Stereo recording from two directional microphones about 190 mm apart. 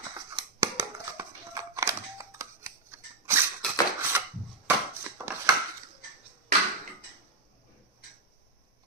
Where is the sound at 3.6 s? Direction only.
5° left (ahead or behind).